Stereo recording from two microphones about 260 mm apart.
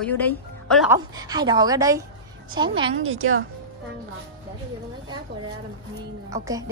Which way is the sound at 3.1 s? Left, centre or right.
Right.